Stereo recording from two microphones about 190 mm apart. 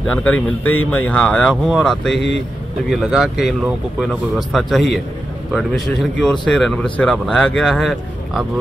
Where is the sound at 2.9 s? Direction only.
5° right (ahead or behind).